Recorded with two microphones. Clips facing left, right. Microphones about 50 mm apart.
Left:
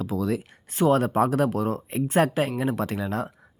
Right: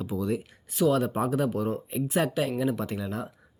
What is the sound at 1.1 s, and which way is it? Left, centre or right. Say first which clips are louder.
Speech: left 5 dB; left.